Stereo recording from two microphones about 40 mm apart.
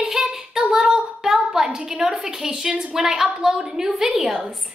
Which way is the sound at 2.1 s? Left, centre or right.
Centre.